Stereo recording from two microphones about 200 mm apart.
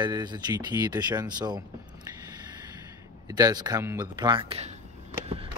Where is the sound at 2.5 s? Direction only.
20° right (ahead or behind).